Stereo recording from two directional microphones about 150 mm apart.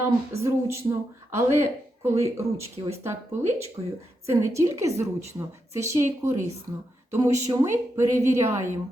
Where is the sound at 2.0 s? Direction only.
15° right (ahead or behind).